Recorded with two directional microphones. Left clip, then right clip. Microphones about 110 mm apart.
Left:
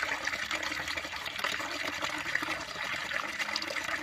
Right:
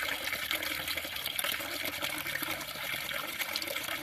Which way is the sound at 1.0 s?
30° right (ahead or behind).